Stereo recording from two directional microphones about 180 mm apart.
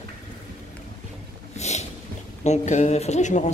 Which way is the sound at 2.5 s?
40° left (ahead or behind).